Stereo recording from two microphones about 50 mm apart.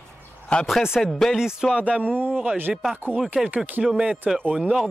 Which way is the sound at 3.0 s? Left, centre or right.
Right.